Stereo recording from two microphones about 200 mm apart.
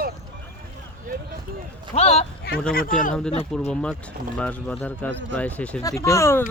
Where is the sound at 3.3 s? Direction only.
30° left (ahead or behind).